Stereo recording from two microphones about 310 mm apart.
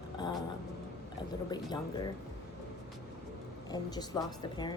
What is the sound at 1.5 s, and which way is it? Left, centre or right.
Speech, centre.